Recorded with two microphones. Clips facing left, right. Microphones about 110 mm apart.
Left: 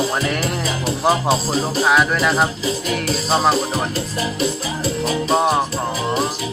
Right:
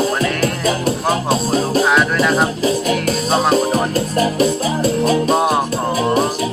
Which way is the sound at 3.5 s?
50° right (ahead or behind).